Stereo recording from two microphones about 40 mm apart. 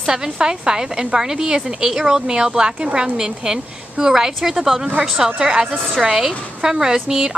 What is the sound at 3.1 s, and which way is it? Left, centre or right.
A woman's voice, centre.